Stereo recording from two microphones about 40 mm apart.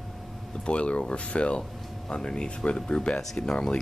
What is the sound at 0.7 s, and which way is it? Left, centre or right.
Speech, left.